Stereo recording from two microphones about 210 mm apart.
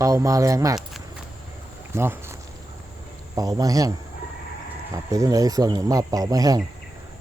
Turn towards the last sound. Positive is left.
turn(degrees=-15)  # may be behind; listen again after turning